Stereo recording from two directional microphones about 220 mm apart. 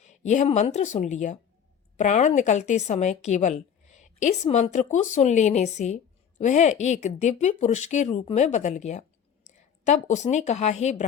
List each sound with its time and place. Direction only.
0.0 s a woman's voice: 30° left (ahead or behind)